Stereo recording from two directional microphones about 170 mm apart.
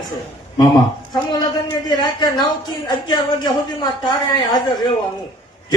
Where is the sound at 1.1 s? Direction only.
25° left (ahead or behind).